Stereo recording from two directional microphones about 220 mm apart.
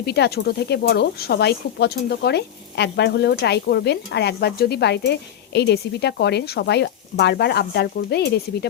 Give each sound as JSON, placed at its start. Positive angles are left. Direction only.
{"t": 0.0, "sound": "speech", "side_deg": 50}